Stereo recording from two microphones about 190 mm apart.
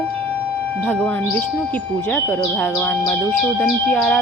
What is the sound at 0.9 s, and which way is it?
A woman's voice, 10° left (ahead or behind).